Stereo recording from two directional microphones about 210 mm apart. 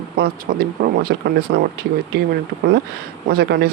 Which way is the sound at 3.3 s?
50° right (ahead or behind).